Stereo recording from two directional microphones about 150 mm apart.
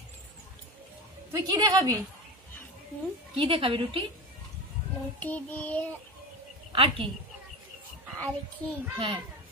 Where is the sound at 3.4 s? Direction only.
35° right (ahead or behind).